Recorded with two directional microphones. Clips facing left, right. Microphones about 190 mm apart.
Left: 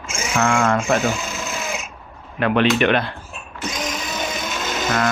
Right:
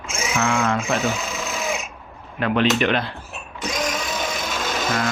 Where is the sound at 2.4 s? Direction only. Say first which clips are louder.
Left 2 dB; 65° left (ahead or behind).